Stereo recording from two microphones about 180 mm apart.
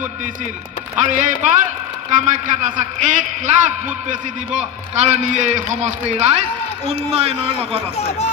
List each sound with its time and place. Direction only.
0.9 s a man's voice: 45° right (ahead or behind)